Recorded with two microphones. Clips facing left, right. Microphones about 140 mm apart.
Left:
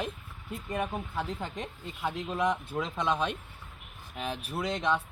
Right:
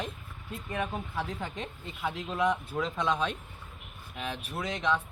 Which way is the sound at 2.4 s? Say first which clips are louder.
Right 3 dB; centre (ahead or behind).